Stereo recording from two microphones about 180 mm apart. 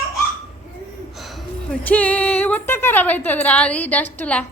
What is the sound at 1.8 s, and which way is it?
A woman's voice, 10° left (ahead or behind).